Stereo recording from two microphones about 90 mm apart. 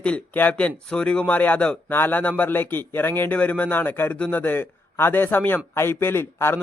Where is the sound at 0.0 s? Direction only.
15° left (ahead or behind).